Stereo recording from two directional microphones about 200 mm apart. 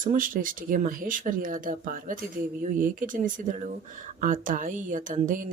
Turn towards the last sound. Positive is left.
turn(degrees=-40)  # may be behind; listen again after turning